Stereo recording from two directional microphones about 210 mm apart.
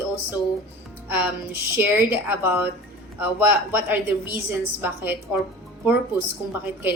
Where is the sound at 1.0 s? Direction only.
10° right (ahead or behind).